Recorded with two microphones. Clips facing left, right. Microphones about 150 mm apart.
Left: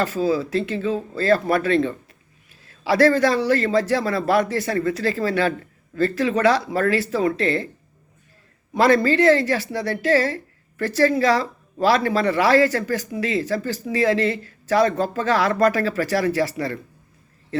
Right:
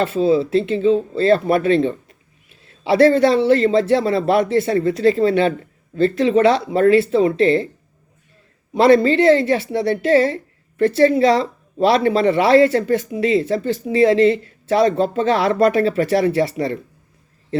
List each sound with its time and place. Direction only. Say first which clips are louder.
0.0 s speech: right 5 dB; 25° right (ahead or behind)
8.7 s speech: right 4 dB; 25° right (ahead or behind)